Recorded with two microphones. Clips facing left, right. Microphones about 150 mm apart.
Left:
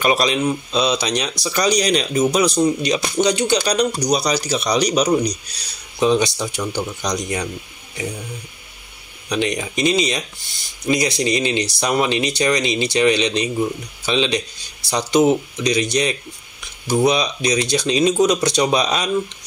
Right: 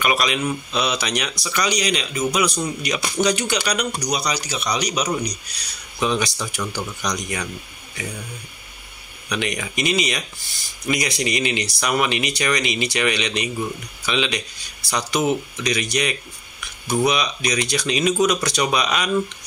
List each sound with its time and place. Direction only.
0.0 s a man's voice: 30° left (ahead or behind)
3.5 s a man's voice: 35° left (ahead or behind)
9.3 s a man's voice: 30° left (ahead or behind)